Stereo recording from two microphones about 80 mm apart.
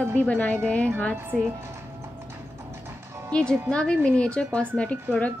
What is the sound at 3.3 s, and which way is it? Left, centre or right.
A woman's voice, centre.